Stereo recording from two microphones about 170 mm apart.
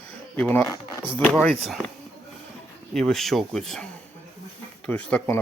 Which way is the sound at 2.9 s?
Centre (ahead or behind).